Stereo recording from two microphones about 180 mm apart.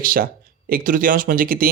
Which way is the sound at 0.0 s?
50° right (ahead or behind).